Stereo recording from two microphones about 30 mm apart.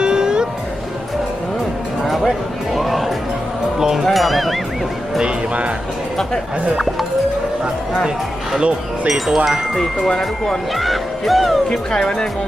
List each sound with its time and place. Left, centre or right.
0.0 s music: right
2.0 s music: centre
3.8 s music: centre
4.0 s music: centre
9.0 s chime: centre
10.2 s speech: centre
10.8 s music: centre
11.9 s speech: left